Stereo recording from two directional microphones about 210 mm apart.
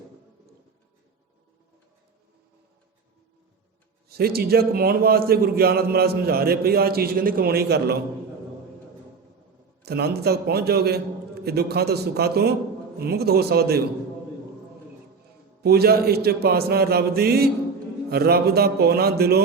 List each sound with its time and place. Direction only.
4.1 s a man's voice: 45° right (ahead or behind)
9.8 s a man's voice: 50° right (ahead or behind)
15.6 s a man's voice: 50° right (ahead or behind)